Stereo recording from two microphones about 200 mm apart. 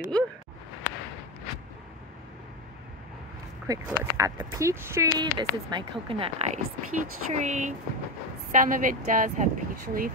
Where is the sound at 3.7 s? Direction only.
15° right (ahead or behind).